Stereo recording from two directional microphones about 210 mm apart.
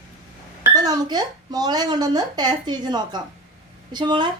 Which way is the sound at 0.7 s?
20° right (ahead or behind).